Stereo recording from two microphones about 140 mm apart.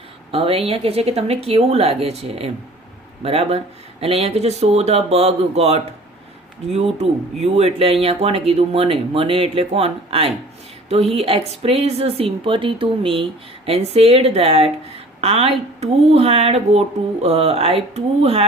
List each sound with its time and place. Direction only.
0.3 s speech: 45° right (ahead or behind)